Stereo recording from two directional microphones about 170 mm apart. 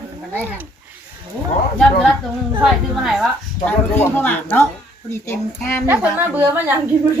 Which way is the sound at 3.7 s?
10° left (ahead or behind).